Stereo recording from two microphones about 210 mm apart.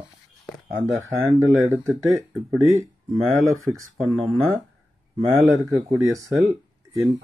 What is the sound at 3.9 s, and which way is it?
Speech, centre (ahead or behind).